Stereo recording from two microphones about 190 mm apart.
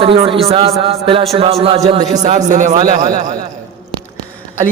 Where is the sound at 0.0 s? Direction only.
30° right (ahead or behind).